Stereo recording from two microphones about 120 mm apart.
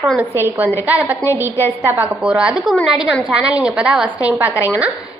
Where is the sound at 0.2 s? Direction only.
15° right (ahead or behind).